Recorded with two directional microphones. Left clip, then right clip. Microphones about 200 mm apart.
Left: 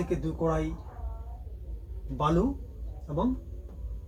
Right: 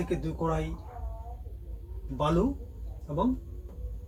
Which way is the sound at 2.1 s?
15° left (ahead or behind).